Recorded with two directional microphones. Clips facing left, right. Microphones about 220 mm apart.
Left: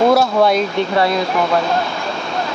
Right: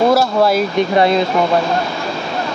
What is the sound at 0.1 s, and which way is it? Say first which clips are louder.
Speech: even; centre (ahead or behind).